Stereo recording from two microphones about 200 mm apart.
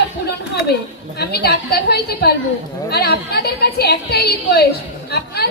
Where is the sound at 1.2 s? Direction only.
55° left (ahead or behind).